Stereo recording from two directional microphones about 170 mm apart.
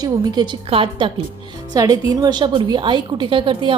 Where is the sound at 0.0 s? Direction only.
25° right (ahead or behind).